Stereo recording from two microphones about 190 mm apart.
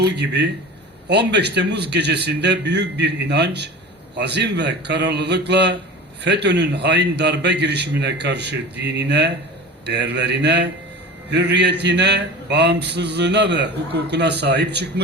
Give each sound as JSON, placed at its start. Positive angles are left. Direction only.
{"t": 0.0, "sound": "a man's voice", "side_deg": -60}